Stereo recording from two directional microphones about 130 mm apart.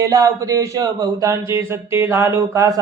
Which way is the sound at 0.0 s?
25° right (ahead or behind).